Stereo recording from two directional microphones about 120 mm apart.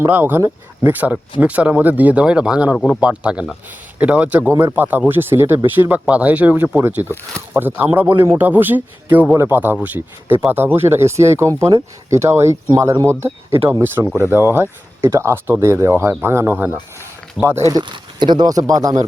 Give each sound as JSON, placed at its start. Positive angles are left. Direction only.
{"t": 0.0, "sound": "speech", "side_deg": -15}